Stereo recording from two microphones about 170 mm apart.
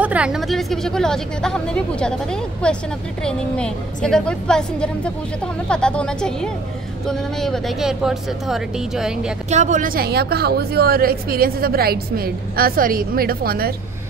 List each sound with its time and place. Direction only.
0.0 s a woman's voice: 5° right (ahead or behind)
9.5 s a woman's voice: 45° right (ahead or behind); by 13.7 s 60° right (ahead or behind)